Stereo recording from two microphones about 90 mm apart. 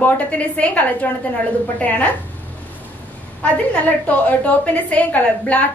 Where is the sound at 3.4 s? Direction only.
15° left (ahead or behind).